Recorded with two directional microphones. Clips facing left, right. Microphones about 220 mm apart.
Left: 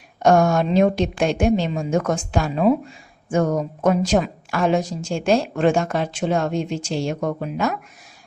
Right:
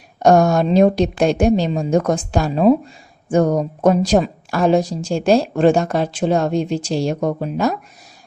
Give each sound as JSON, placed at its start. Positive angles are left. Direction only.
{"t": 0.2, "sound": "a woman's voice", "side_deg": -35}